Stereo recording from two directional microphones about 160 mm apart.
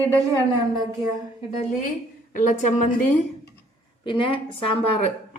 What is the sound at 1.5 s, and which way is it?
A woman's voice, 50° left (ahead or behind).